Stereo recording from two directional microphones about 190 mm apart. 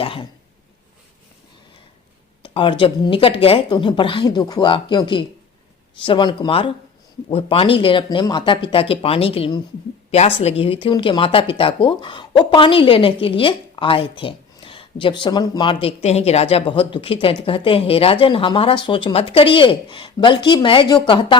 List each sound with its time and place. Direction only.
0.0 s cough: 30° left (ahead or behind)
2.4 s speech: 25° left (ahead or behind)